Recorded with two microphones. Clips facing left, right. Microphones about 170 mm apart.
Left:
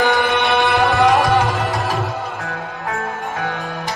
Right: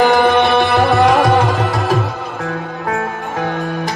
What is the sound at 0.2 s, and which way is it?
Music, 40° right (ahead or behind).